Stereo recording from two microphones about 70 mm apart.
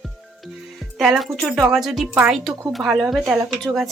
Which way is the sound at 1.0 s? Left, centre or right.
Centre.